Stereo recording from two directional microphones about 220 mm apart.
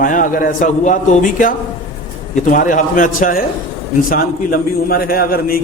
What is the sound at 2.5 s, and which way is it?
A man's voice, 35° left (ahead or behind).